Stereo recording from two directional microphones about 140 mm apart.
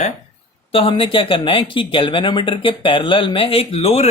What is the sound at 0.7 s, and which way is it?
Speech, 40° left (ahead or behind).